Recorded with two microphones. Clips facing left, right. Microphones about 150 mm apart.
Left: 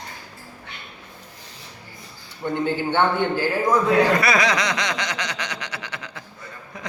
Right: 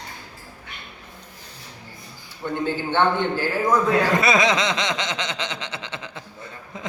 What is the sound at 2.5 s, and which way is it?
A man's voice, 15° left (ahead or behind).